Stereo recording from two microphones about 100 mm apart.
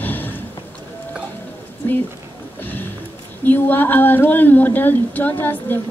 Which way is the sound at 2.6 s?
20° left (ahead or behind).